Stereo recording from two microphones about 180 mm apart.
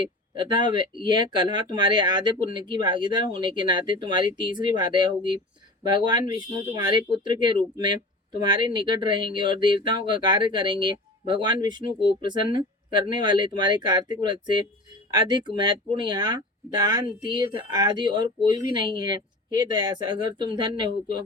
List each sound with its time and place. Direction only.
0.3 s speech: 25° right (ahead or behind)